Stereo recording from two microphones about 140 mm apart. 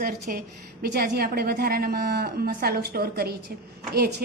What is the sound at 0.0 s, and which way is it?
A woman's voice, 90° right.